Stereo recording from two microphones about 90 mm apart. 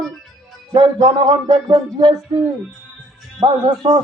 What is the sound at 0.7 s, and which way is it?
Music, 60° right (ahead or behind).